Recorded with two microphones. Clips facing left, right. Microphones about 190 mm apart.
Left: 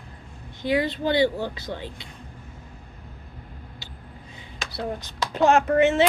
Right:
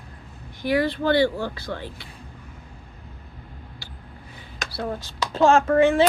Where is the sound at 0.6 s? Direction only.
20° left (ahead or behind).